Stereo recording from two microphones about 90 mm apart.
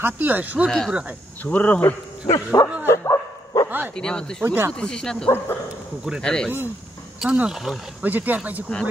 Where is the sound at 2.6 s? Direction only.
40° left (ahead or behind).